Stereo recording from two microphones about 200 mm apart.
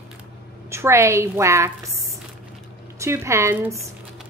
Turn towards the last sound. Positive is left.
turn(degrees=-15)  # may be behind; listen again after turning